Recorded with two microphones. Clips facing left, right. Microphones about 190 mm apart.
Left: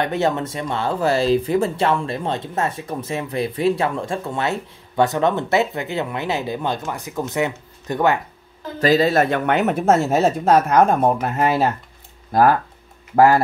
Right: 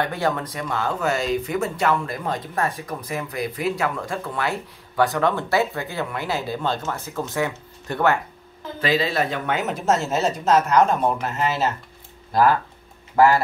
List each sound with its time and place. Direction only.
0.0 s speech: 25° left (ahead or behind)
8.7 s speech: 40° left (ahead or behind)